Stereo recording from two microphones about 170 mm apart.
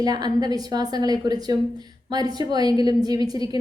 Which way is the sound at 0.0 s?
25° right (ahead or behind).